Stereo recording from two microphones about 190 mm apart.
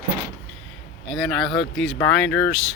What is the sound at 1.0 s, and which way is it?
A man's voice, centre (ahead or behind).